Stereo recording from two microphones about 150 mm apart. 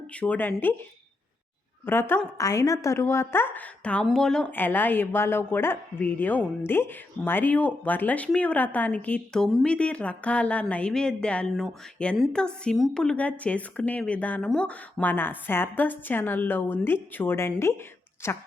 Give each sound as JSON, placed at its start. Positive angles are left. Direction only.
{"t": 0.2, "sound": "a woman's voice", "side_deg": 10}
{"t": 1.8, "sound": "a woman's voice", "side_deg": 15}